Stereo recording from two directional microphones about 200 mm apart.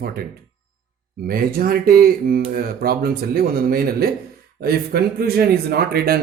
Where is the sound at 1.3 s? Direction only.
45° right (ahead or behind).